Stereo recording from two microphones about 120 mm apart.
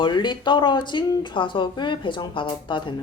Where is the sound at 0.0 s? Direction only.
40° left (ahead or behind).